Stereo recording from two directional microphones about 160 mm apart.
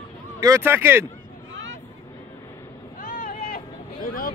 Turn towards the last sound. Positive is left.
turn(degrees=65)  # may be behind; listen again after turning